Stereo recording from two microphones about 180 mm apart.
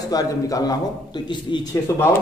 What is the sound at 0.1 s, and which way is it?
A man's voice, 20° left (ahead or behind).